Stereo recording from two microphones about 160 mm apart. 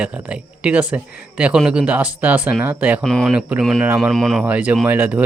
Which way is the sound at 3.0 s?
Centre (ahead or behind).